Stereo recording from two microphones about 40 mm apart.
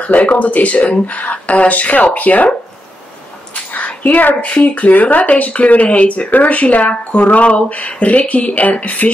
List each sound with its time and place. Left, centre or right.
0.0 s speech: left
3.7 s a sound: left
4.6 s speech: left